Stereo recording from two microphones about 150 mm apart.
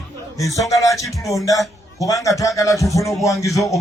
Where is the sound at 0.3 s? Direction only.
20° left (ahead or behind).